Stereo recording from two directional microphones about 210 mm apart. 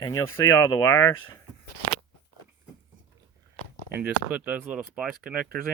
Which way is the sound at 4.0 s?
5° right (ahead or behind).